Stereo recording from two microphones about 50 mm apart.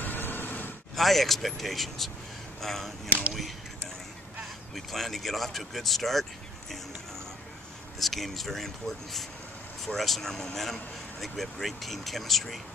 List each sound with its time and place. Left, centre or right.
0.0 s a sound: left
0.9 s speech: centre
3.1 s speech: right
4.7 s speech: centre
8.0 s speech: centre